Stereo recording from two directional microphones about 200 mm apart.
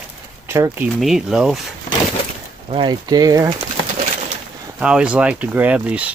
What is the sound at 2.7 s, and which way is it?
Speech, 20° right (ahead or behind).